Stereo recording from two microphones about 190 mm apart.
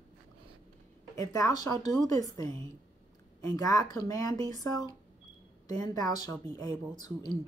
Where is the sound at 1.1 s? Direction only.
20° left (ahead or behind).